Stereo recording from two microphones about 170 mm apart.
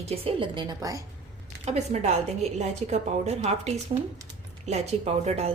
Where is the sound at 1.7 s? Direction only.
40° right (ahead or behind).